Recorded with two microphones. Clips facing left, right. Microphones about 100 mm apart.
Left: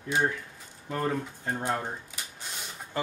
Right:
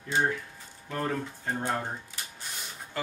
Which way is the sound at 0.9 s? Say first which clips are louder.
Left 2 dB; 10° left (ahead or behind).